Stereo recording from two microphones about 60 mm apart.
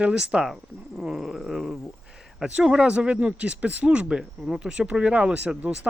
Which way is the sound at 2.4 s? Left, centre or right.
Centre.